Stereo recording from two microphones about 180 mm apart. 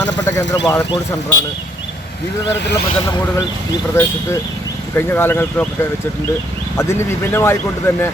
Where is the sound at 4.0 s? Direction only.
15° left (ahead or behind).